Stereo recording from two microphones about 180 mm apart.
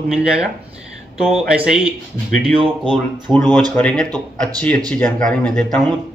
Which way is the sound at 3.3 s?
Centre (ahead or behind).